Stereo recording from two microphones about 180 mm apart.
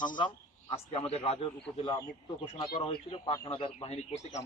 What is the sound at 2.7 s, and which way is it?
A man's voice, 30° left (ahead or behind).